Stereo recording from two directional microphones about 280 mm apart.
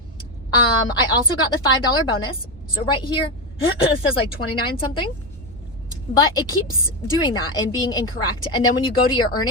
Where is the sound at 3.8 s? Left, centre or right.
Centre.